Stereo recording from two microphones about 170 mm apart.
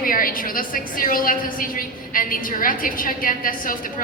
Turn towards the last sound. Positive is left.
turn(degrees=55)  # may be behind; listen again after turning